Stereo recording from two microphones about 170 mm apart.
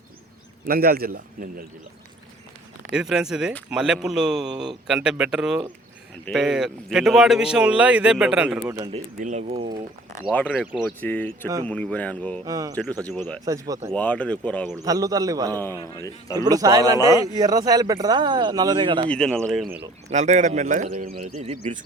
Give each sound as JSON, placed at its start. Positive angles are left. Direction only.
{"t": 0.7, "sound": "a man's voice", "side_deg": -60}
{"t": 2.9, "sound": "speech", "side_deg": -5}
{"t": 9.1, "sound": "speech", "side_deg": -45}
{"t": 10.3, "sound": "speech", "side_deg": 5}
{"t": 12.5, "sound": "speech", "side_deg": -20}
{"t": 13.0, "sound": "speech", "side_deg": 10}
{"t": 13.4, "sound": "speech", "side_deg": -20}
{"t": 13.9, "sound": "speech", "side_deg": 10}
{"t": 14.8, "sound": "speech", "side_deg": -20}
{"t": 15.8, "sound": "speech", "side_deg": 15}
{"t": 16.3, "sound": "speech", "side_deg": -20}
{"t": 19.0, "sound": "speech", "side_deg": 5}
{"t": 19.7, "sound": "speech", "side_deg": -40}